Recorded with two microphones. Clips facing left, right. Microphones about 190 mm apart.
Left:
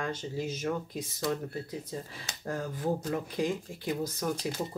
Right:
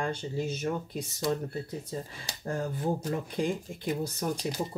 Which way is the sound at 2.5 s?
30° right (ahead or behind).